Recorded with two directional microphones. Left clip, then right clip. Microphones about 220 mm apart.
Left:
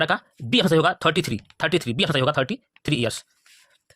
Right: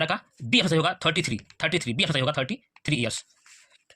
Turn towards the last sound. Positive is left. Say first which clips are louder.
# left 3 dB
turn(degrees=50)  # may be behind; listen again after turning